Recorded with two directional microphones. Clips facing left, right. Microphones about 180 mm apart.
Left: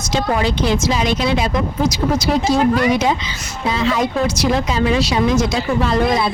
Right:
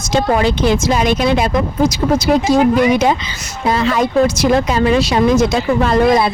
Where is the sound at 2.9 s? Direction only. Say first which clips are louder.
Right 3 dB; 55° right (ahead or behind).